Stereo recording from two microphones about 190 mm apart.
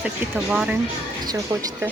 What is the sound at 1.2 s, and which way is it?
Speech, 20° right (ahead or behind).